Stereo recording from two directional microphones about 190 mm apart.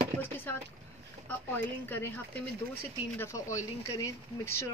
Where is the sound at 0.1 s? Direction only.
35° right (ahead or behind).